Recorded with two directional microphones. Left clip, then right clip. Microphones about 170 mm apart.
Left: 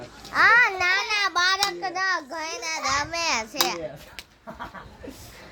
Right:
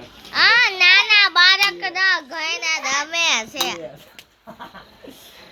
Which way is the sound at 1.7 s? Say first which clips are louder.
Right 7 dB; 30° right (ahead or behind).